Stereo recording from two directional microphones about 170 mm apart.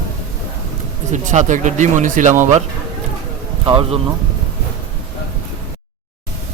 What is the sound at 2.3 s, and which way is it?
Speech, 15° right (ahead or behind).